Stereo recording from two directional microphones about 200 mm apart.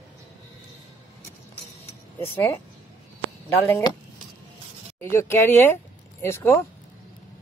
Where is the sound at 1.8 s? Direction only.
15° left (ahead or behind).